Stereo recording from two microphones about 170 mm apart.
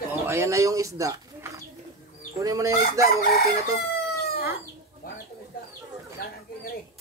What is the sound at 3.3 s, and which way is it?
Chicken, 65° left (ahead or behind).